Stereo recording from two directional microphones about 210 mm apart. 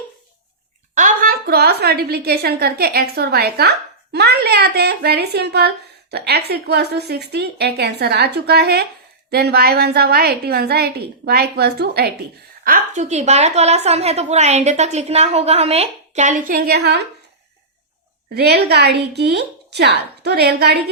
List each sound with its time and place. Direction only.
0.9 s a woman's voice: 40° right (ahead or behind)
12.6 s a woman's voice: 40° right (ahead or behind)
18.3 s a woman's voice: 50° right (ahead or behind)